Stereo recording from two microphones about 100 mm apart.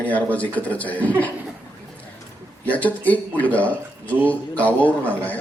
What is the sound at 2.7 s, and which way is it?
Speech, 15° left (ahead or behind).